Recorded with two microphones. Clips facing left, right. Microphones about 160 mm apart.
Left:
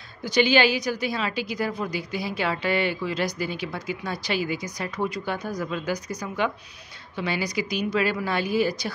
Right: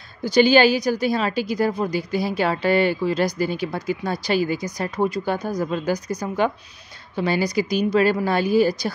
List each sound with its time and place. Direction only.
0.2 s speech: 40° right (ahead or behind)